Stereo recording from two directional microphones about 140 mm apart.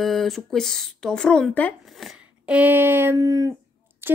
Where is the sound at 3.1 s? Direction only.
25° right (ahead or behind).